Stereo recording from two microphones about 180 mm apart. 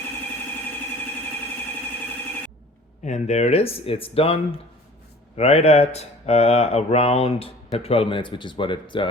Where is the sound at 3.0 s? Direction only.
40° left (ahead or behind).